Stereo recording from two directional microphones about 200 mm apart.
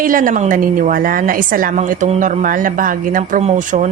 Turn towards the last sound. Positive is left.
turn(degrees=-40)  # may be behind; listen again after turning